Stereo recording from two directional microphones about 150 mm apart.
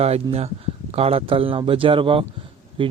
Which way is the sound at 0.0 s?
45° right (ahead or behind).